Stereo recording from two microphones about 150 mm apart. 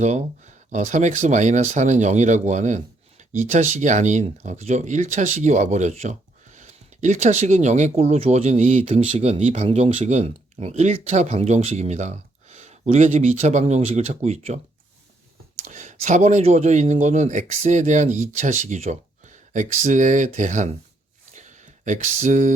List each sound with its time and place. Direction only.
0.0 s speech: 50° right (ahead or behind)
15.6 s speech: 55° right (ahead or behind)
21.3 s a sound: 55° right (ahead or behind)